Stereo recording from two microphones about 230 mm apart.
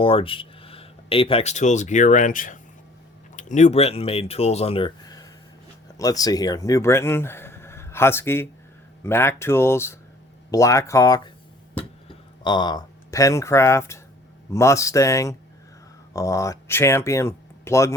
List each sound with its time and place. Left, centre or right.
0.0 s speech: left
11.8 s a sound: left
14.5 s speech: centre